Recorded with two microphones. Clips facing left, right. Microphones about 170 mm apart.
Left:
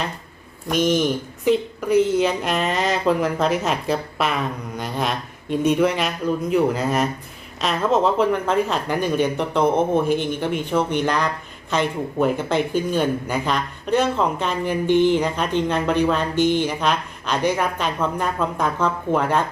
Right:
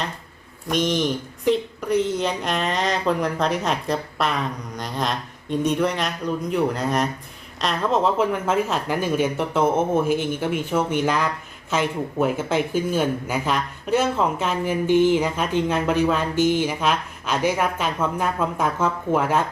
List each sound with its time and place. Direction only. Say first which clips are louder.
0.7 s speech: left 3 dB; 5° left (ahead or behind)